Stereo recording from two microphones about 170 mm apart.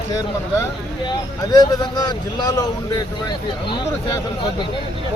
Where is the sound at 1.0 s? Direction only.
25° left (ahead or behind).